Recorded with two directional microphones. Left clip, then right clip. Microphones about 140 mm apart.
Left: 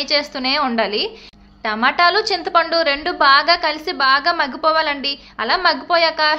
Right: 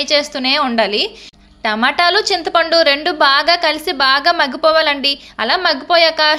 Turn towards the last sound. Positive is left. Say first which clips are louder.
# right 4 dB
turn(degrees=-30)  # may be behind; listen again after turning